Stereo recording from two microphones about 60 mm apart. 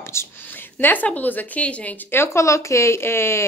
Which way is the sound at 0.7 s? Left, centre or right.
Left.